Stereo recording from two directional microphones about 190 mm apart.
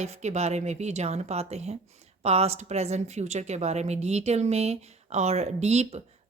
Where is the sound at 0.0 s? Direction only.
35° right (ahead or behind).